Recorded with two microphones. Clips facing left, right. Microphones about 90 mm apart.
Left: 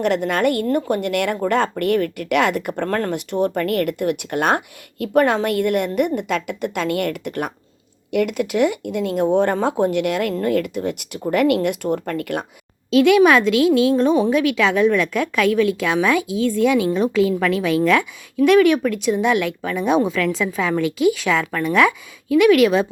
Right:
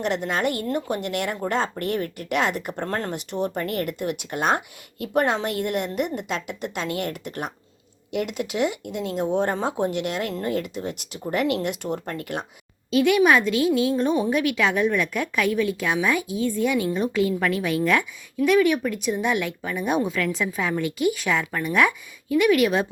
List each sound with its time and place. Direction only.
0.0 s speech: 55° left (ahead or behind)
12.9 s a woman's voice: 90° left